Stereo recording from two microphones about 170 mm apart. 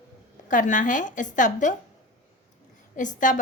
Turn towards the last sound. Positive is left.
turn(degrees=50)  # may be behind; listen again after turning